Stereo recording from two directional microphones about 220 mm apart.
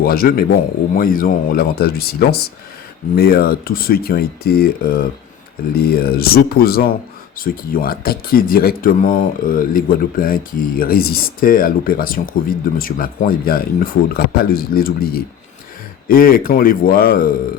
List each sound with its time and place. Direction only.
0.0 s a man's voice: 40° left (ahead or behind)